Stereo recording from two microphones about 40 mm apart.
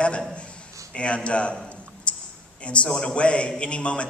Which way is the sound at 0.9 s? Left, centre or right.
Left.